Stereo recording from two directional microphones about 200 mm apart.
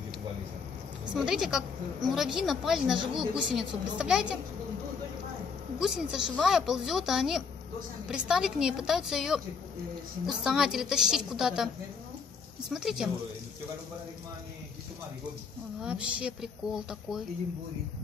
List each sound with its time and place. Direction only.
1.1 s a woman's voice: 5° right (ahead or behind)
5.8 s a woman's voice: centre (ahead or behind)
15.8 s a woman's voice: 5° right (ahead or behind)